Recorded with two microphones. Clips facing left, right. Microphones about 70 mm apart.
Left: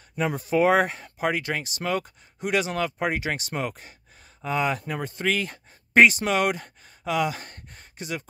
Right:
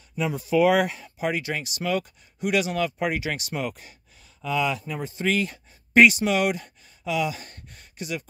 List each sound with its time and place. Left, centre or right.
0.1 s speech: left